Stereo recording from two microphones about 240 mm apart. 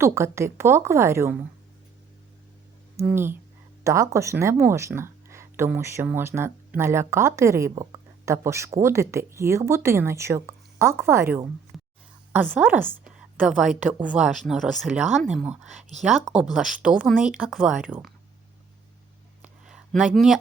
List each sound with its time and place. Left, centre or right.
0.0 s speech: centre
2.9 s speech: centre
11.7 s a sound: centre
12.3 s speech: centre
19.4 s a sound: centre
20.1 s speech: centre